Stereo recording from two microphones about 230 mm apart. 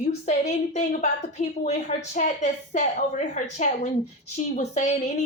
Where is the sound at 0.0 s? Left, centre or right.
Left.